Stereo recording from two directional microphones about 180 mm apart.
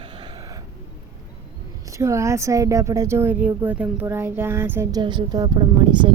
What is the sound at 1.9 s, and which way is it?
A woman's voice, 15° right (ahead or behind).